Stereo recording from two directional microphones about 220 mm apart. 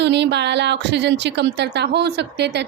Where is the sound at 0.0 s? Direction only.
50° right (ahead or behind).